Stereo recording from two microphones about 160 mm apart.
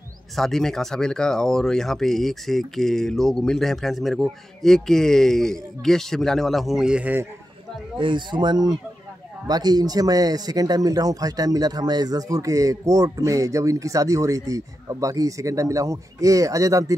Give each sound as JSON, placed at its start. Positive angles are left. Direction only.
{"t": 0.4, "sound": "speech", "side_deg": 0}
{"t": 8.0, "sound": "a man's voice", "side_deg": -30}